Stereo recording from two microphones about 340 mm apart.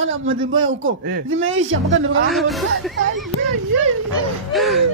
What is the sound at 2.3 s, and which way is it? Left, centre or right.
Speech, centre.